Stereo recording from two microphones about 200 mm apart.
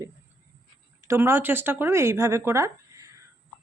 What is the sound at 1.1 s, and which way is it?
Speech, 10° right (ahead or behind).